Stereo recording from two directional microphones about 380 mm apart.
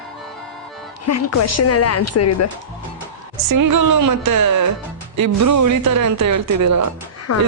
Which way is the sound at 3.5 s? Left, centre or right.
Right.